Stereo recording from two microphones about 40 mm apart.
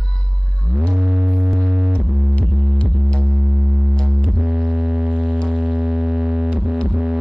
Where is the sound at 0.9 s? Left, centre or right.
Right.